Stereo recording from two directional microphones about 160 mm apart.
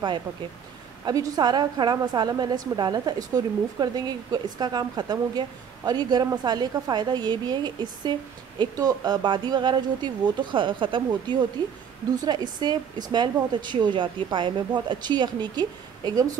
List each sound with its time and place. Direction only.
1.0 s a woman's voice: 20° right (ahead or behind)